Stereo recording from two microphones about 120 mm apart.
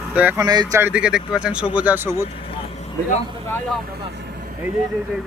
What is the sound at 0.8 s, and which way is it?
Speech, 10° right (ahead or behind).